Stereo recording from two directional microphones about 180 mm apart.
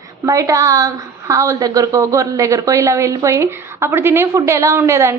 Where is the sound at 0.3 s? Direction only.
20° right (ahead or behind).